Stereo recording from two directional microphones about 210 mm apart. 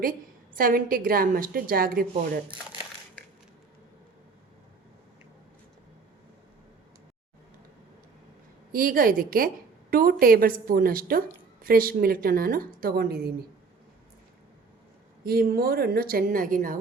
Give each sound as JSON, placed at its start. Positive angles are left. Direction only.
{"t": 0.0, "sound": "a woman's voice", "side_deg": -40}
{"t": 8.7, "sound": "a woman's voice", "side_deg": -40}
{"t": 15.2, "sound": "a woman's voice", "side_deg": -45}